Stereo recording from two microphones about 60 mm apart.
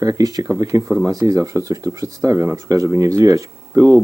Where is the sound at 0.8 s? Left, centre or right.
Right.